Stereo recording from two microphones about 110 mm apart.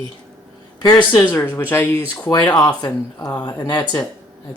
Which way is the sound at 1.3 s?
20° left (ahead or behind).